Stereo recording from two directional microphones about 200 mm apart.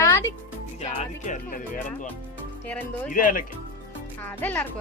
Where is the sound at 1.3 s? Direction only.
40° left (ahead or behind).